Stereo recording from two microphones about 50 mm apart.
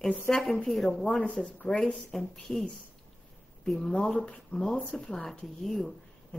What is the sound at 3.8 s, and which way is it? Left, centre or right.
Speech, centre.